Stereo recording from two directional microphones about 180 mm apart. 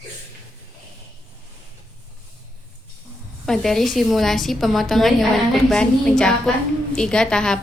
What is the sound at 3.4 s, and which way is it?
A woman's voice, centre (ahead or behind).